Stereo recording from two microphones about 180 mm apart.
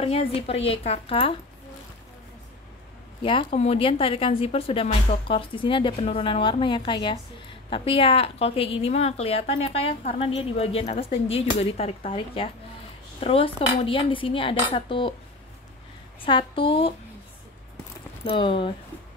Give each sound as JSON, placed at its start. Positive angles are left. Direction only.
{"t": 0.0, "sound": "a woman's voice", "side_deg": 30}
{"t": 3.2, "sound": "a woman's voice", "side_deg": 30}
{"t": 16.2, "sound": "speech", "side_deg": 30}
{"t": 18.2, "sound": "speech", "side_deg": 30}